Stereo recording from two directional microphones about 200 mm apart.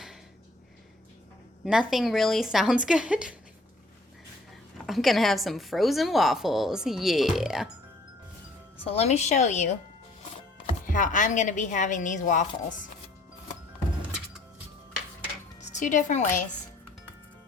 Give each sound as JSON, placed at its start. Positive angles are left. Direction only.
{"t": 1.6, "sound": "a woman's voice", "side_deg": -5}
{"t": 4.9, "sound": "a woman's voice", "side_deg": 0}
{"t": 8.8, "sound": "a woman's voice", "side_deg": 30}
{"t": 10.8, "sound": "a woman's voice", "side_deg": 40}
{"t": 15.6, "sound": "a woman's voice", "side_deg": 40}